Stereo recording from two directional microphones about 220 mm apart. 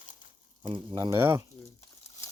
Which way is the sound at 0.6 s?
20° right (ahead or behind).